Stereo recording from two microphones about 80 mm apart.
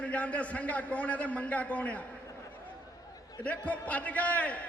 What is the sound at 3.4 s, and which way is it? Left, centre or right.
A man's voice, centre.